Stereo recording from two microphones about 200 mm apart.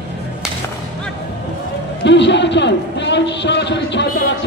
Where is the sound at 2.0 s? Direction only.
60° left (ahead or behind).